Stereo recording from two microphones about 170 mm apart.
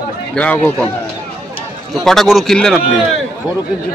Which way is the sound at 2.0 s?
Centre (ahead or behind).